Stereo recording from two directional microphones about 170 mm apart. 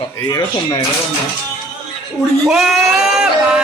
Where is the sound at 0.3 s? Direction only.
25° left (ahead or behind).